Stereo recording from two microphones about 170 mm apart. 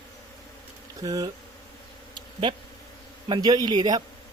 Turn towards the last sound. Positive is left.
turn(degrees=-25)  # may be behind; listen again after turning